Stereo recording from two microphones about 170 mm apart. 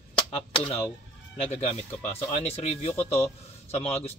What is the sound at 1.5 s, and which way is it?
A man's voice, 40° left (ahead or behind).